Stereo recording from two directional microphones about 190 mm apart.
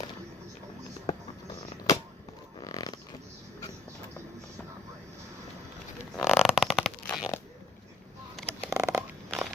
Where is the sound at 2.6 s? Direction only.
20° left (ahead or behind).